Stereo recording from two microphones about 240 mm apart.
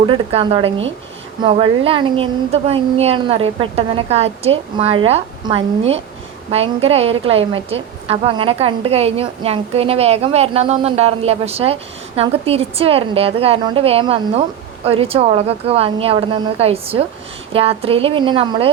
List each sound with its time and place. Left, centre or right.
0.0 s a woman's voice: right